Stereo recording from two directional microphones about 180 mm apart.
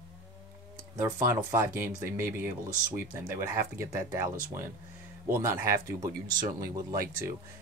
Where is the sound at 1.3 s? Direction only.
15° right (ahead or behind).